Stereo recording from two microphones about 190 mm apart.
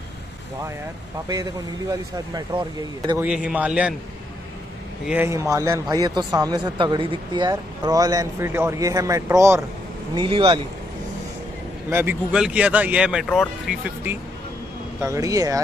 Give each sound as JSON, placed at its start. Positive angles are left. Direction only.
{"t": 1.3, "sound": "a man's voice", "side_deg": -20}
{"t": 3.2, "sound": "speech", "side_deg": -5}
{"t": 5.0, "sound": "a man's voice", "side_deg": -10}
{"t": 11.9, "sound": "speech", "side_deg": -10}
{"t": 15.0, "sound": "speech", "side_deg": -15}